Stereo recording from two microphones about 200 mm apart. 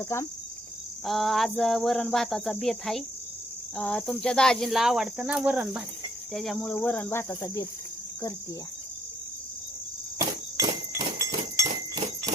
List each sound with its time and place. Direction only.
0.0 s cricket: 15° left (ahead or behind)
1.0 s cricket: centre (ahead or behind)
10.2 s cricket: 15° right (ahead or behind)